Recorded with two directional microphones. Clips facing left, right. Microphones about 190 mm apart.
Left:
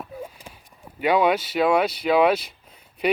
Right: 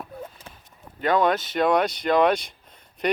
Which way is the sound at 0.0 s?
10° left (ahead or behind).